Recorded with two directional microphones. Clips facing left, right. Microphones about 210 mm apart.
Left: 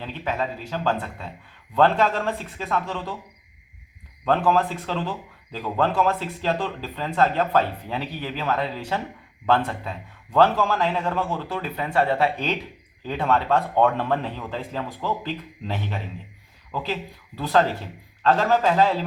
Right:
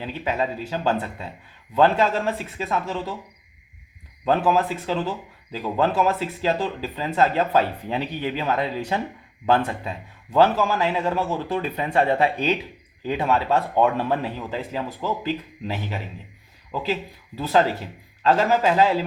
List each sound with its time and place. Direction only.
0.0 s speech: 15° right (ahead or behind)
4.3 s speech: 10° right (ahead or behind)